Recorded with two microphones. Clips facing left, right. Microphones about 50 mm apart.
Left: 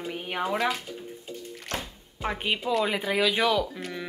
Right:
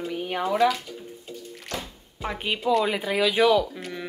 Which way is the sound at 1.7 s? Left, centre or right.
Left.